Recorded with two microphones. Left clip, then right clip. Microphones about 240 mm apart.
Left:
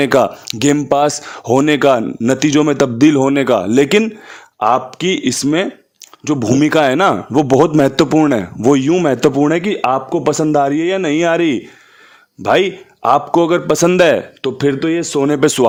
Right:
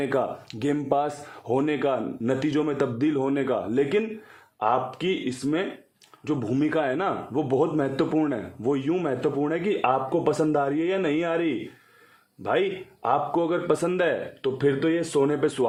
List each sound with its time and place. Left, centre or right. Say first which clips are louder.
0.0 s a man's voice: left 13 dB; left